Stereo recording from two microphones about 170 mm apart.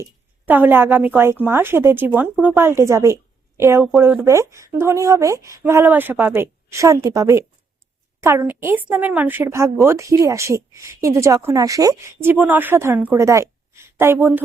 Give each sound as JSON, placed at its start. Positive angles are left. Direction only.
{"t": 0.0, "sound": "a woman's voice", "side_deg": -10}